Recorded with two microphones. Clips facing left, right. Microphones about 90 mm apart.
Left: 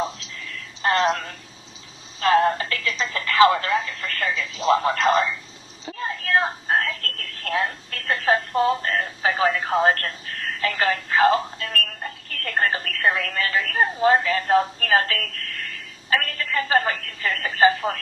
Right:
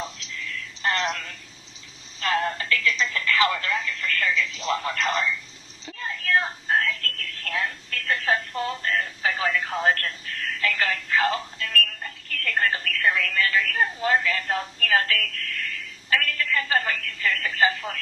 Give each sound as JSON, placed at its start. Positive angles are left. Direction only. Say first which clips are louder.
{"t": 0.8, "sound": "a sound", "louder": "left 6 dB", "side_deg": 20}
{"t": 1.1, "sound": "speech", "louder": "left 6 dB", "side_deg": 40}
{"t": 2.2, "sound": "telephone", "louder": "left 7 dB", "side_deg": 30}
{"t": 3.9, "sound": "telephone", "louder": "even", "side_deg": 35}
{"t": 4.6, "sound": "speech", "louder": "left 10 dB", "side_deg": 25}
{"t": 5.8, "sound": "a sound", "louder": "left 4 dB", "side_deg": 20}
{"t": 6.1, "sound": "a sound", "louder": "left 1 dB", "side_deg": 35}
{"t": 6.7, "sound": "telephone", "louder": "left 1 dB", "side_deg": 35}
{"t": 8.5, "sound": "speech", "louder": "left 8 dB", "side_deg": 20}
{"t": 8.8, "sound": "a sound", "louder": "left 2 dB", "side_deg": 35}
{"t": 11.7, "sound": "telephone", "louder": "right 2 dB", "side_deg": 35}
{"t": 12.8, "sound": "a woman's voice", "louder": "left 1 dB", "side_deg": 35}
{"t": 16.0, "sound": "telephone", "louder": "left 1 dB", "side_deg": 35}
{"t": 17.1, "sound": "speech", "louder": "even", "side_deg": 35}